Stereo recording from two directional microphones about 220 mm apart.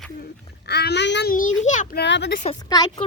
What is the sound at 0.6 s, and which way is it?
Speech, 50° left (ahead or behind).